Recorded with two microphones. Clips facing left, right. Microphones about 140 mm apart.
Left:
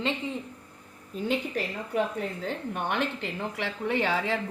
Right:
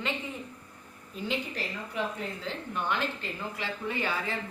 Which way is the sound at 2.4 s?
55° left (ahead or behind).